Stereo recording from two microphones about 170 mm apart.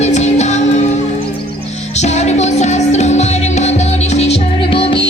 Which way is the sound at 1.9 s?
40° left (ahead or behind).